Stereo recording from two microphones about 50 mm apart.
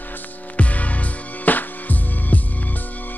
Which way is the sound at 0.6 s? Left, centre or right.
Left.